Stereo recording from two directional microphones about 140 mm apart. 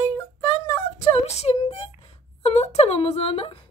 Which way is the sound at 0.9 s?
50° left (ahead or behind).